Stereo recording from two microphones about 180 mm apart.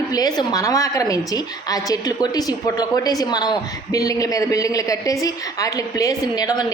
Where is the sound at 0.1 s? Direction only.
20° left (ahead or behind).